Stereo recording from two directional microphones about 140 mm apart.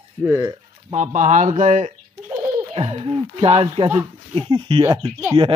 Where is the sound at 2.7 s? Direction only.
40° right (ahead or behind).